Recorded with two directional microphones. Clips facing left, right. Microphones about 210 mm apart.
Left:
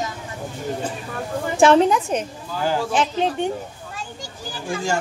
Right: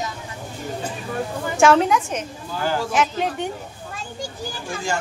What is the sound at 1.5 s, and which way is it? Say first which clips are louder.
A woman's voice: left 2 dB; 35° left (ahead or behind).